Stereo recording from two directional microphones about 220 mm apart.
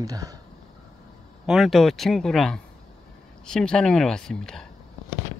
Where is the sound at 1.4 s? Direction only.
Centre (ahead or behind).